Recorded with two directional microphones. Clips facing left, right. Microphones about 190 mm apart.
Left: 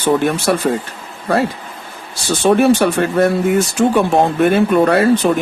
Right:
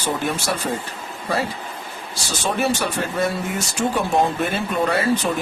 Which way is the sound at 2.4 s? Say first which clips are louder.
Left 11 dB; 60° left (ahead or behind).